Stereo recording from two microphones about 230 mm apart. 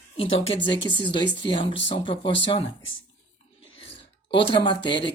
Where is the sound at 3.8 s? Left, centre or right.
Left.